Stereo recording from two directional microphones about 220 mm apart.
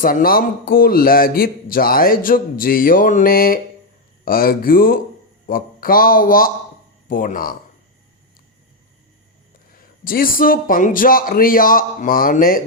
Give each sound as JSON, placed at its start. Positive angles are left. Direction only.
{"t": 0.0, "sound": "a man's voice", "side_deg": 40}
{"t": 9.7, "sound": "a man's voice", "side_deg": 40}